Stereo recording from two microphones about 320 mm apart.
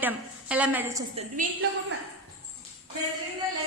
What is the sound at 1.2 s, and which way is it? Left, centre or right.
Speech, right.